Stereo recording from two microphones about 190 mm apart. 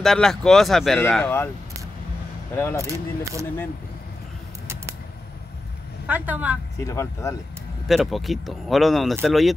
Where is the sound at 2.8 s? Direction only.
15° right (ahead or behind).